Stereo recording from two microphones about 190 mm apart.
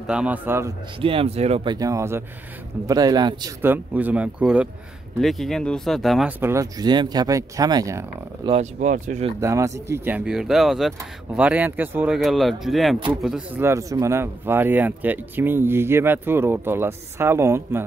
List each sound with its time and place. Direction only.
0.0 s speech: 5° right (ahead or behind)
1.0 s speech: 30° right (ahead or behind)
3.6 s speech: 10° right (ahead or behind)
6.4 s speech: 15° right (ahead or behind)
8.5 s speech: 35° right (ahead or behind)
9.4 s speech: 15° right (ahead or behind)
13.6 s speech: 15° right (ahead or behind)